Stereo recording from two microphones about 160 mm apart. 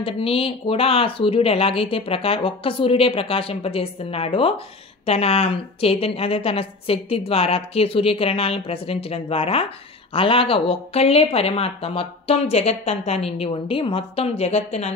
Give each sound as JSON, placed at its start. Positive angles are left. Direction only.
{"t": 0.0, "sound": "a woman's voice", "side_deg": 35}